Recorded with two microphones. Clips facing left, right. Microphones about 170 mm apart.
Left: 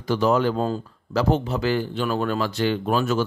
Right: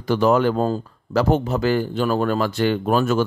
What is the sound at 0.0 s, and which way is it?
Speech, 55° right (ahead or behind).